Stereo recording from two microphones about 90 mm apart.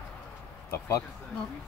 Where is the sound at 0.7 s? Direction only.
30° left (ahead or behind).